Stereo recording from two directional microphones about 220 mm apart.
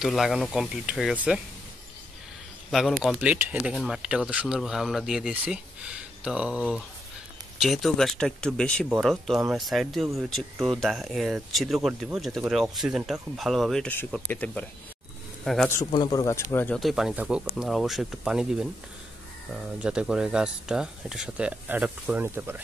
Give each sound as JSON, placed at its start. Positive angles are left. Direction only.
{"t": 0.0, "sound": "speech", "side_deg": 0}
{"t": 3.0, "sound": "speech", "side_deg": -5}
{"t": 7.6, "sound": "speech", "side_deg": 0}
{"t": 15.8, "sound": "speech", "side_deg": 20}